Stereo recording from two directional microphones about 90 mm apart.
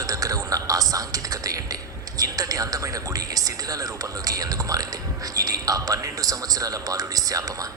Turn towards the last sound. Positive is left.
turn(degrees=-40)  # may be behind; listen again after turning